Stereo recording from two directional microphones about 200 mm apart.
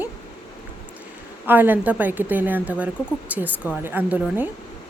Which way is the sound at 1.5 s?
10° right (ahead or behind).